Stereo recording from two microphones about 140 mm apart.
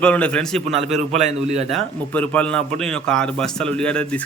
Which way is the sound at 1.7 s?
10° left (ahead or behind).